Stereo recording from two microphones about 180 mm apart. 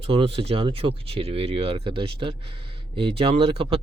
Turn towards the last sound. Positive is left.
turn(degrees=-30)  # may be behind; listen again after turning